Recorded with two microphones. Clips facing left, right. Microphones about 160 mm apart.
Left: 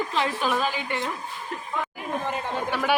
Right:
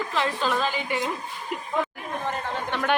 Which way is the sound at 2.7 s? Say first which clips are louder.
Even; 5° left (ahead or behind).